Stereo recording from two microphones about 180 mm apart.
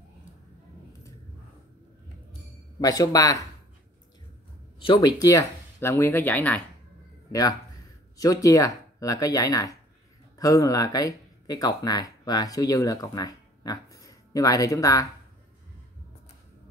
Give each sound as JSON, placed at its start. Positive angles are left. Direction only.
{"t": 2.8, "sound": "speech", "side_deg": 20}
{"t": 4.7, "sound": "speech", "side_deg": 25}
{"t": 8.2, "sound": "speech", "side_deg": 20}